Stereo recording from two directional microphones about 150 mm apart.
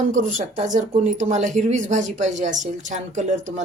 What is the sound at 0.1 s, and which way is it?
Speech, 60° right (ahead or behind).